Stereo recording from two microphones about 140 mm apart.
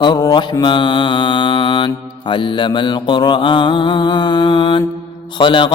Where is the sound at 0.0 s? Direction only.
30° left (ahead or behind).